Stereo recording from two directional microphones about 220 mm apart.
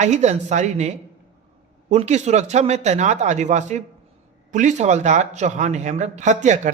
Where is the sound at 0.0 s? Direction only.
30° right (ahead or behind).